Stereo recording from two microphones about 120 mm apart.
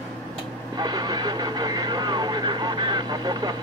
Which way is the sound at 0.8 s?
35° right (ahead or behind).